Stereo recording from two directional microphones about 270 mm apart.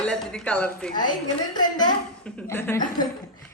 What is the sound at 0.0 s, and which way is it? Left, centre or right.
Speech, centre.